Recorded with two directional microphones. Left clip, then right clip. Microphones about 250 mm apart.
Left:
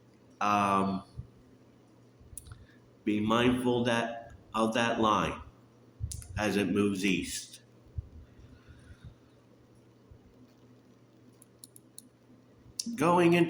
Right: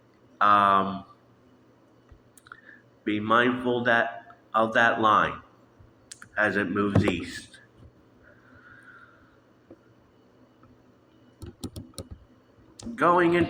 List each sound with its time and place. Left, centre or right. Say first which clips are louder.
0.3 s speech: right 8 dB; left
2.5 s clicking: right 12 dB; left
3.0 s a man's voice: right 6 dB; left
13.0 s speech: right 4 dB; left